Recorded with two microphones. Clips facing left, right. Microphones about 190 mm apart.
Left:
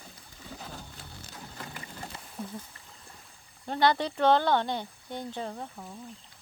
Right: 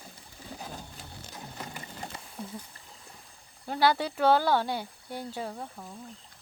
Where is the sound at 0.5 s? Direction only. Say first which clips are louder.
Right 2 dB; 15° right (ahead or behind).